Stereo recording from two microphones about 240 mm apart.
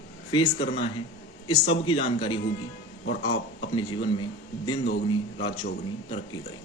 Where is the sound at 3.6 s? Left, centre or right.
Centre.